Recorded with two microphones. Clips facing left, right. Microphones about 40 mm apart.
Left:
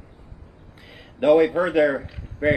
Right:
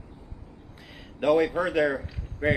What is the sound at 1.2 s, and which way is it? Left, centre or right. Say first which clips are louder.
Speech: left 6 dB; left.